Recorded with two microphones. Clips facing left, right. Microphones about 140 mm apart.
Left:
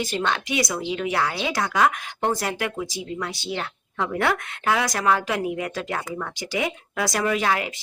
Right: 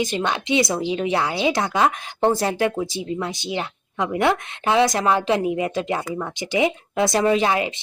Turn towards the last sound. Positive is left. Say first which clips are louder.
# right 4 dB
turn(degrees=-20)  # may be behind; listen again after turning